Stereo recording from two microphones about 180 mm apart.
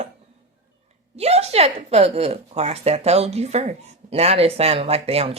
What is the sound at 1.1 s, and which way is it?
Speech, 35° right (ahead or behind).